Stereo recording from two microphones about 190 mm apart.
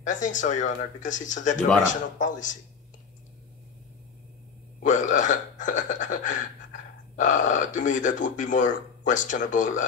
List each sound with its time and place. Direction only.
0.0 s speech: 40° left (ahead or behind)
4.7 s speech: 40° left (ahead or behind)